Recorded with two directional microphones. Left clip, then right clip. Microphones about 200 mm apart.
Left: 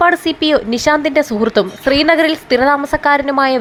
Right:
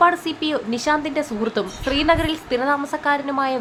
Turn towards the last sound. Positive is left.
turn(degrees=25)  # may be behind; listen again after turning